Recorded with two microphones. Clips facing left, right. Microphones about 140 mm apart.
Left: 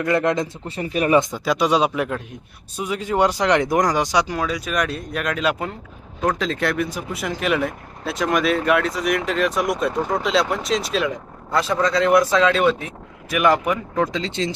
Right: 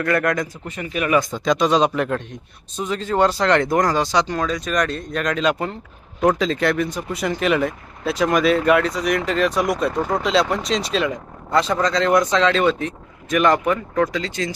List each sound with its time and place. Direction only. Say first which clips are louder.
0.0 s speech: left 1 dB; 20° left (ahead or behind)
1.5 s speech: right 1 dB; 10° left (ahead or behind)
13.9 s speech: right 1 dB; 20° left (ahead or behind)